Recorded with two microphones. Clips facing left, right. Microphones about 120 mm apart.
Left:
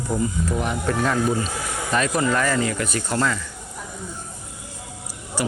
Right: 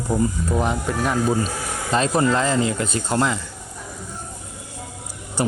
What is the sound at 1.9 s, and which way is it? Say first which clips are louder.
Speech: right 3 dB; 30° right (ahead or behind).